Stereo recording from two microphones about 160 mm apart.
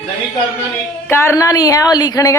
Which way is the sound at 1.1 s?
15° left (ahead or behind).